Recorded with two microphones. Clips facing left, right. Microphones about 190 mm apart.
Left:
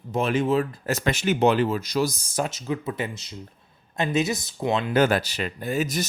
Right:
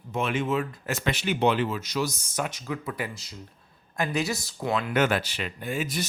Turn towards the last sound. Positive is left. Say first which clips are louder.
# left 4 dB
turn(degrees=40)  # may be behind; listen again after turning